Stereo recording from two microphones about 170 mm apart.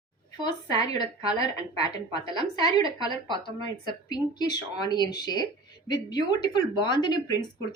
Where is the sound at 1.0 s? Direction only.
35° right (ahead or behind).